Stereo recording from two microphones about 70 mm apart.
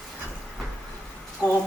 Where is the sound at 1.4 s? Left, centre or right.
Right.